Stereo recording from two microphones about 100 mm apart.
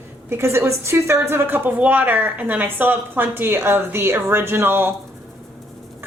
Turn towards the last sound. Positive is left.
turn(degrees=-25)  # may be behind; listen again after turning